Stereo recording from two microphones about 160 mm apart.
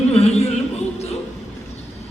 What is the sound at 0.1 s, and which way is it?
Music, 40° left (ahead or behind).